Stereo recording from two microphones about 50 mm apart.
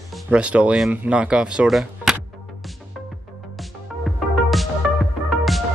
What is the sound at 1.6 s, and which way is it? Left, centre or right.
Speech, centre.